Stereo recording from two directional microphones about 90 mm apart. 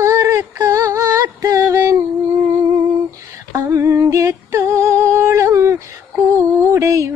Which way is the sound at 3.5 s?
35° right (ahead or behind).